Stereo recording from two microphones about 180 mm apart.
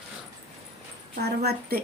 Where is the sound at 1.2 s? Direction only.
60° right (ahead or behind).